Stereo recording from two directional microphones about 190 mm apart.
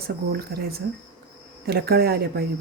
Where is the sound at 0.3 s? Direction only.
55° right (ahead or behind).